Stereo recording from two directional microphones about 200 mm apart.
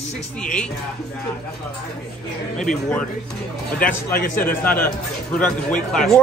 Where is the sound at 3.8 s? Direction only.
45° left (ahead or behind).